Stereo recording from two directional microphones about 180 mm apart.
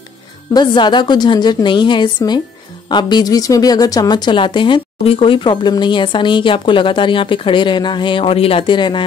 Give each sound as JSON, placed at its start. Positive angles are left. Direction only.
{"t": 0.5, "sound": "a woman's voice", "side_deg": 25}